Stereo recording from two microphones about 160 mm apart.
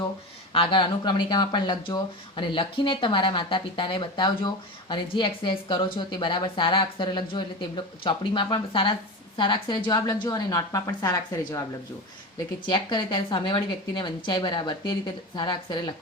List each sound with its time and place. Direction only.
0.5 s a woman's voice: 30° left (ahead or behind)
12.6 s a woman's voice: 30° left (ahead or behind)